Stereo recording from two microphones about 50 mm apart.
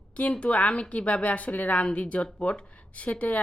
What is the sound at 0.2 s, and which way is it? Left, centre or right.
A woman's voice, left.